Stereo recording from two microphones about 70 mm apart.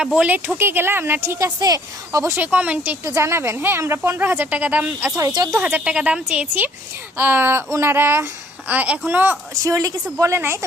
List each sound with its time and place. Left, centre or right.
0.2 s speech: right
1.5 s a woman's voice: right
2.3 s speech: right
3.2 s speech: right
4.4 s speech: right
4.9 s a woman's voice: right
5.3 s a woman's voice: right
5.7 s a woman's voice: centre; by 8.3 s right
8.6 s speech: right
9.6 s a woman's voice: right